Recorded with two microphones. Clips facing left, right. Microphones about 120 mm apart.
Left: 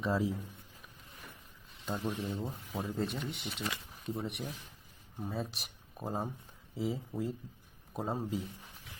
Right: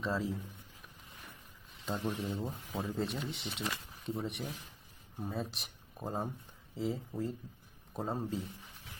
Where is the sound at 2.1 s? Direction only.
Centre (ahead or behind).